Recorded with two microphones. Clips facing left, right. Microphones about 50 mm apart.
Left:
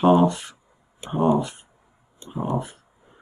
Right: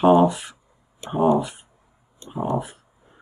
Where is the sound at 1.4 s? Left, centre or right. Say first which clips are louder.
Even; centre.